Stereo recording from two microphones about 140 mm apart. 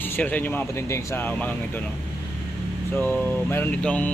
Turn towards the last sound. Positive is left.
turn(degrees=10)  # may be behind; listen again after turning